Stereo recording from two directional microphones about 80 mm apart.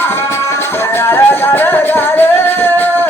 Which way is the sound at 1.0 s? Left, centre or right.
Left.